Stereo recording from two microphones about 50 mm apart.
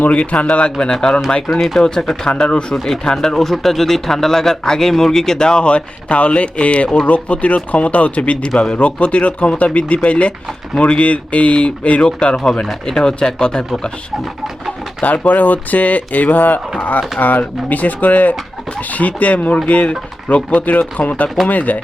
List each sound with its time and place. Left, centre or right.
0.0 s speech: left
2.7 s speech: centre; by 8.4 s left
8.4 s speech: centre
8.7 s speech: left
15.0 s speech: left